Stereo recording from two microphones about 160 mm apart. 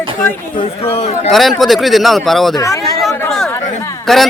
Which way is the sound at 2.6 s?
20° left (ahead or behind).